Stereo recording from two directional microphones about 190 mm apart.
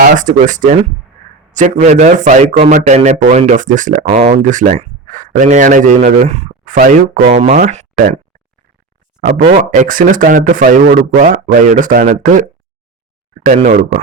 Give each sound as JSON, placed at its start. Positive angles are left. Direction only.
{"t": 0.0, "sound": "speech", "side_deg": -40}
{"t": 9.2, "sound": "speech", "side_deg": -45}